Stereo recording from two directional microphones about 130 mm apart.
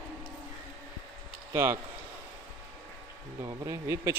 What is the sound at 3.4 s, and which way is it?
Speech, 25° right (ahead or behind).